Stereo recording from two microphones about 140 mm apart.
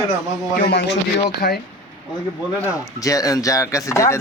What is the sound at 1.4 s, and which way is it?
Speech, 90° left.